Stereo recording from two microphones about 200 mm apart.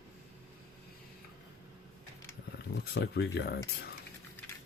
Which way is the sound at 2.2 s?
50° left (ahead or behind).